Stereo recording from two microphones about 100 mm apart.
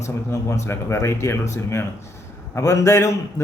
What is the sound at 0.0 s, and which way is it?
Speech, 30° left (ahead or behind).